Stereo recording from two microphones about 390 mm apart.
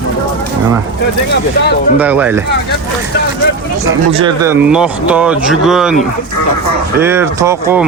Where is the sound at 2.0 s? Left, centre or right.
Centre.